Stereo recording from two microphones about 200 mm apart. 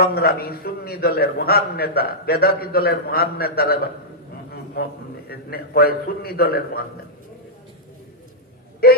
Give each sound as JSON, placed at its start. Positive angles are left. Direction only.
{"t": 0.0, "sound": "a man's voice", "side_deg": 50}
{"t": 8.8, "sound": "a man's voice", "side_deg": 50}